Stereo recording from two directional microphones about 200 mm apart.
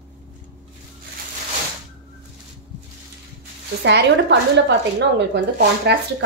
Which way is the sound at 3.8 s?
60° right (ahead or behind).